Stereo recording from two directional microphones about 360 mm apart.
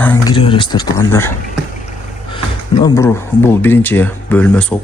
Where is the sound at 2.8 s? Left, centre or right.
Centre.